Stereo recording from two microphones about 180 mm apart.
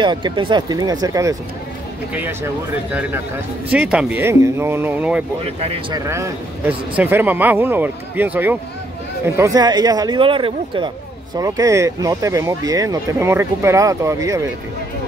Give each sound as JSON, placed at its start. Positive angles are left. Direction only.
{"t": 0.0, "sound": "speech", "side_deg": -25}
{"t": 5.6, "sound": "speech", "side_deg": -35}
{"t": 5.9, "sound": "speech", "side_deg": -15}